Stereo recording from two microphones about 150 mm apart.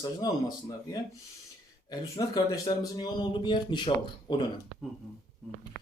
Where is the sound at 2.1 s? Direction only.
25° left (ahead or behind).